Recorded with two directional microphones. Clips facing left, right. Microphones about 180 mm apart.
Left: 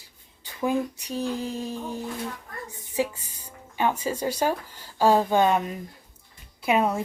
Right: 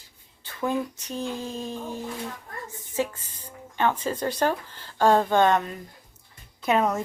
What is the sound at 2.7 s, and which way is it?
A woman's voice, 15° left (ahead or behind).